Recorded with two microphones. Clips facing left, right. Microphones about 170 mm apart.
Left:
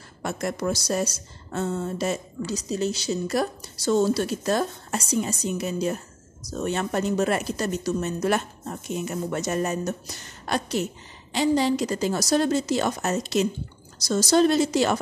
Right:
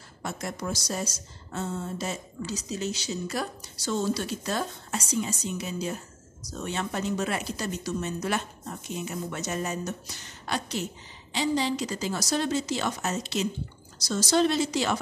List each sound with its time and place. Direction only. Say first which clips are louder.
0.2 s a woman's voice: left 6 dB; 65° left (ahead or behind)
2.7 s speech: left 7 dB; 40° left (ahead or behind)